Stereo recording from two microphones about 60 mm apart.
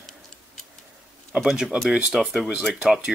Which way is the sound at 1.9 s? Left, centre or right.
Centre.